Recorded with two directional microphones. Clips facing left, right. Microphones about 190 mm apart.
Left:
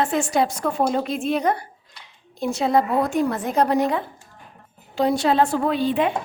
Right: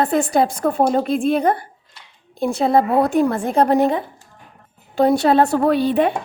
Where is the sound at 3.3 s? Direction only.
30° right (ahead or behind).